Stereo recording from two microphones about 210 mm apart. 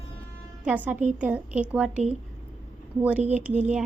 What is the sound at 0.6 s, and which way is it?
A woman's voice, 10° right (ahead or behind).